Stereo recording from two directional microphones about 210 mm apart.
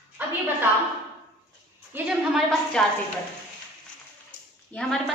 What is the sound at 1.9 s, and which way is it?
Speech, centre (ahead or behind).